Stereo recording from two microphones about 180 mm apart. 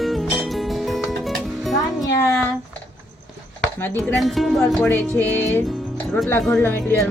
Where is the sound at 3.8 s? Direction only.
10° left (ahead or behind).